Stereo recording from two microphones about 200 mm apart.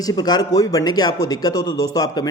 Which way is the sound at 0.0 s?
20° left (ahead or behind).